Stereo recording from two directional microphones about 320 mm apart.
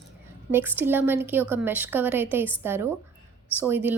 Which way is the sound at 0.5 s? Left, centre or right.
Centre.